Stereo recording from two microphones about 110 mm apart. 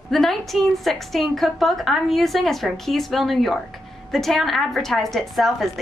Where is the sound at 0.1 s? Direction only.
5° left (ahead or behind).